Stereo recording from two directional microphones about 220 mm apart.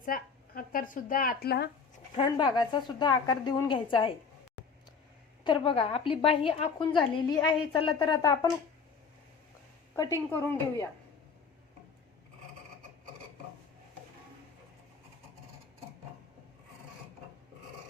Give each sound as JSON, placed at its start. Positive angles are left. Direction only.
{"t": 0.0, "sound": "speech", "side_deg": 40}
{"t": 2.1, "sound": "a woman's voice", "side_deg": 20}
{"t": 5.4, "sound": "a woman's voice", "side_deg": 25}
{"t": 9.9, "sound": "a woman's voice", "side_deg": 15}